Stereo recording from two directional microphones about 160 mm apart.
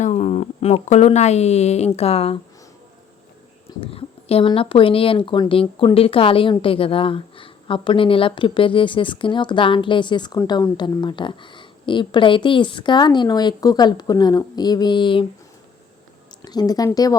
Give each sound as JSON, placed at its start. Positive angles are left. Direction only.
{"t": 0.0, "sound": "speech", "side_deg": 45}
{"t": 3.8, "sound": "speech", "side_deg": 35}
{"t": 16.4, "sound": "speech", "side_deg": 25}